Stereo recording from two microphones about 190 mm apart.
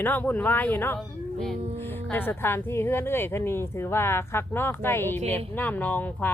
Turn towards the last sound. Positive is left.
turn(degrees=10)  # may be behind; listen again after turning